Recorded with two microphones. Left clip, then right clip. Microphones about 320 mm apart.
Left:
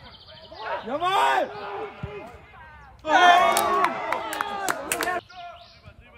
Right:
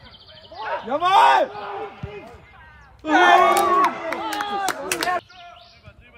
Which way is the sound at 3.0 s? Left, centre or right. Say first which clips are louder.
Right 1 dB; centre.